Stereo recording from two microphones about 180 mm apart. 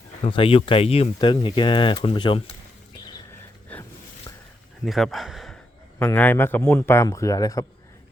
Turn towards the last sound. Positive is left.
turn(degrees=20)  # may be behind; listen again after turning